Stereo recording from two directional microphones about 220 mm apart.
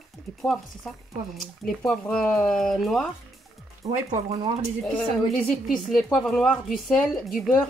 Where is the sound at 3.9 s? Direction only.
30° right (ahead or behind).